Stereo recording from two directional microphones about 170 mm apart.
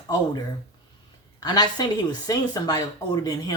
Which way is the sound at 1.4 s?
25° left (ahead or behind).